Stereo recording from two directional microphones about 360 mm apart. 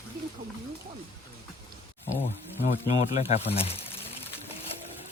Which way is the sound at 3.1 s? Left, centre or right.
Centre.